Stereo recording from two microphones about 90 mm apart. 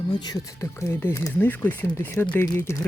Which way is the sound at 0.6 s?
30° left (ahead or behind).